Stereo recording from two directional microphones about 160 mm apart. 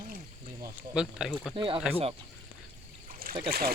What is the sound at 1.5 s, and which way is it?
Speech, 30° right (ahead or behind).